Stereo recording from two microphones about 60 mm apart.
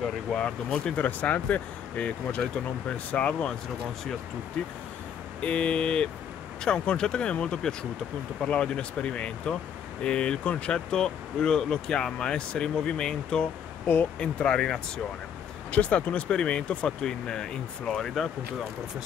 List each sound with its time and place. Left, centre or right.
0.0 s speech: centre
0.9 s speech: left
4.6 s speech: centre